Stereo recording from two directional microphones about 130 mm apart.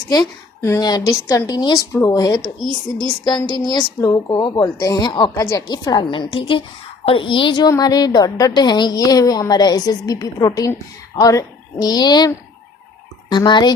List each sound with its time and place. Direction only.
0.1 s a woman's voice: 25° left (ahead or behind)
5.4 s a woman's voice: 25° left (ahead or behind)
13.3 s a woman's voice: 35° left (ahead or behind)